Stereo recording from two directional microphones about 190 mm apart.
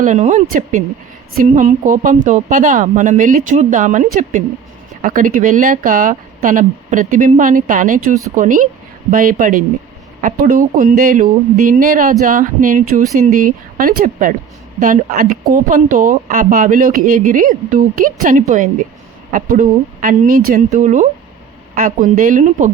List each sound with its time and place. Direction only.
0.0 s speech: 40° right (ahead or behind)